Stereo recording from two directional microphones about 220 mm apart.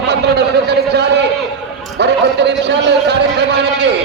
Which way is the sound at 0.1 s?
50° right (ahead or behind).